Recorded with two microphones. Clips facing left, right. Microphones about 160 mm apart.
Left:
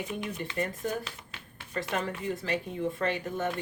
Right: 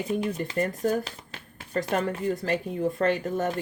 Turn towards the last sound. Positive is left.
turn(degrees=-45)  # may be behind; listen again after turning